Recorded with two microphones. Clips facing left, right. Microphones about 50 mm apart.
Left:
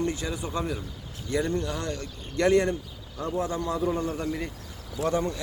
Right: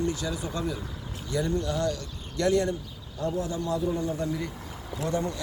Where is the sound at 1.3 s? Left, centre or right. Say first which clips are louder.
Left 1 dB; left.